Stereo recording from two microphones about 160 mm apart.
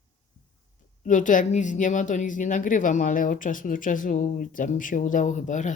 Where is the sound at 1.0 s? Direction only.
55° left (ahead or behind).